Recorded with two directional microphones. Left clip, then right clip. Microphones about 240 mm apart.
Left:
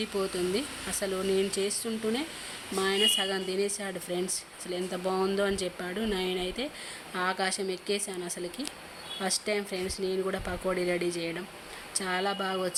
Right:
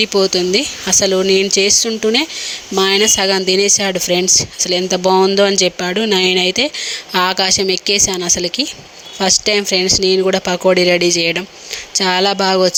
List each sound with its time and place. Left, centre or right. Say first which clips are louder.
0.0 s speech: right 17 dB; right